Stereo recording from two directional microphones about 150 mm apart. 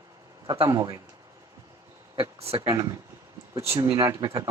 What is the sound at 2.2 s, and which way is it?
Speech, 40° right (ahead or behind).